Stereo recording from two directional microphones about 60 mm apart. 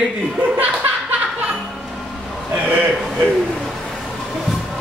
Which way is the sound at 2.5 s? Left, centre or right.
Right.